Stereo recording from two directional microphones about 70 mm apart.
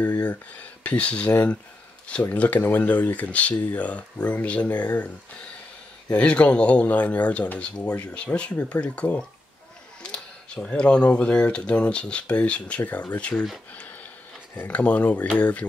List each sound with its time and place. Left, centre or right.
0.0 s speech: left
2.3 s speech: centre
14.7 s speech: centre